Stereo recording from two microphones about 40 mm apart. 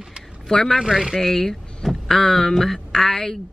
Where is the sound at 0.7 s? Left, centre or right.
Centre.